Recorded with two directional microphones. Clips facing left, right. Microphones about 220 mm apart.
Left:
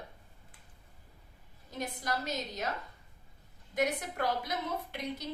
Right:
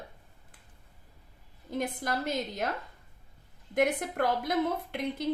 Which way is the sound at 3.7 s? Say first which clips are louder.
Right 5 dB; 55° right (ahead or behind).